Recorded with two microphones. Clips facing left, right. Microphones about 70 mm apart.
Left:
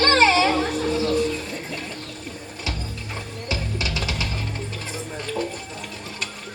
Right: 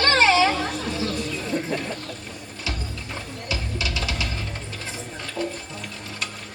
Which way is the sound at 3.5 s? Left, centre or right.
Left.